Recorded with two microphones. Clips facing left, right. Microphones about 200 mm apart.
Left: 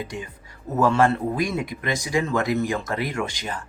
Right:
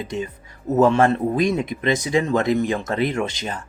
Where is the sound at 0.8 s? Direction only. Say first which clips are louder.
Right 3 dB; 20° right (ahead or behind).